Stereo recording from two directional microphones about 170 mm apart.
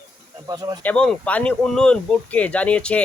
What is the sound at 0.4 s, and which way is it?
Speech, 25° right (ahead or behind).